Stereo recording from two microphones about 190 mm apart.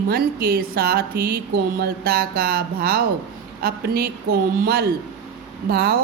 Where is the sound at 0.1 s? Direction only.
50° right (ahead or behind).